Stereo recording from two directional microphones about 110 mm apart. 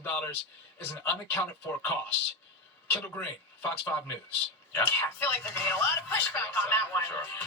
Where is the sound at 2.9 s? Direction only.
15° left (ahead or behind).